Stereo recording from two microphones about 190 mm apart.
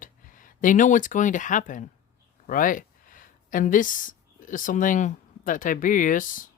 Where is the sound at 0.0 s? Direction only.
45° left (ahead or behind).